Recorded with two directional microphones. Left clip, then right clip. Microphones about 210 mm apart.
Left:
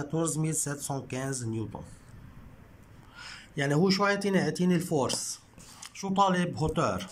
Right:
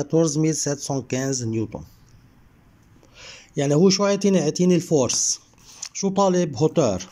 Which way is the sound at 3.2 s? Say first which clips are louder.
Right 7 dB; 15° right (ahead or behind).